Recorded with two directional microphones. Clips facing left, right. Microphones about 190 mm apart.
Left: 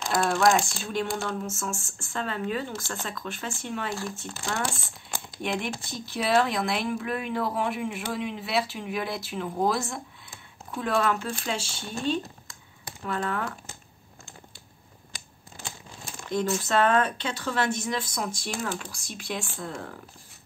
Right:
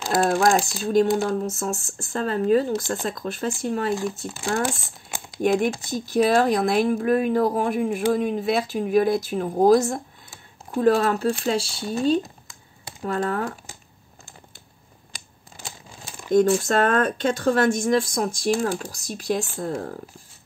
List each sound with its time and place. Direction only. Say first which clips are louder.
0.1 s a sound: right 3 dB; 40° right (ahead or behind)
1.1 s speech: right 8 dB; 40° right (ahead or behind)
4.6 s crumpling: right 5 dB; 10° right (ahead or behind)
5.4 s speech: right 10 dB; 45° right (ahead or behind)
16.6 s speech: right 3 dB; 45° right (ahead or behind)